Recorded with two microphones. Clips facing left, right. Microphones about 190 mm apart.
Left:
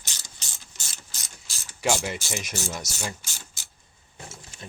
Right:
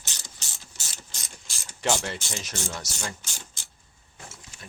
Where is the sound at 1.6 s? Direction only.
10° left (ahead or behind).